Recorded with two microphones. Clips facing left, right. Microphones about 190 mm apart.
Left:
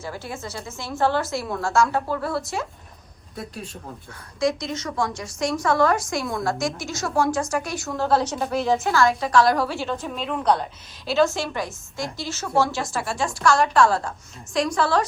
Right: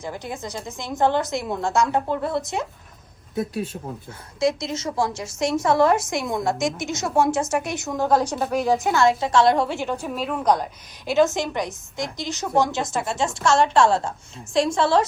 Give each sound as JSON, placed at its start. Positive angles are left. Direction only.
{"t": 0.0, "sound": "a woman's voice", "side_deg": -15}
{"t": 3.5, "sound": "speech", "side_deg": 0}
{"t": 4.4, "sound": "a woman's voice", "side_deg": -25}